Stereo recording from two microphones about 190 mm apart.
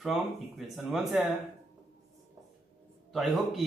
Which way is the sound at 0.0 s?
Centre (ahead or behind).